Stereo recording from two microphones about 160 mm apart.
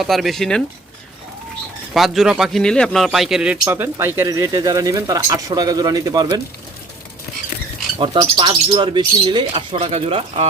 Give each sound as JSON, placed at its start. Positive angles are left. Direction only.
{"t": 0.0, "sound": "a man's voice", "side_deg": 0}
{"t": 1.9, "sound": "a man's voice", "side_deg": 0}
{"t": 3.6, "sound": "speech", "side_deg": -15}
{"t": 7.9, "sound": "speech", "side_deg": -30}